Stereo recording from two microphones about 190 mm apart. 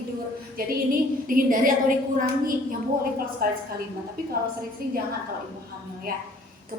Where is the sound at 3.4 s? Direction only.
50° right (ahead or behind).